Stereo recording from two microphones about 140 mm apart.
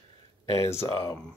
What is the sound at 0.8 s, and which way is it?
Speech, 25° left (ahead or behind).